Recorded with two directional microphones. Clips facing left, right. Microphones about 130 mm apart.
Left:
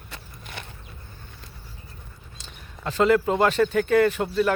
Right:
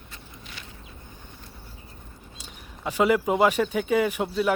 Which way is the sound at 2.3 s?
10° right (ahead or behind).